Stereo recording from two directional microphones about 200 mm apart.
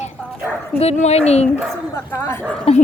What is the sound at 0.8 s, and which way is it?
Speech, 30° left (ahead or behind).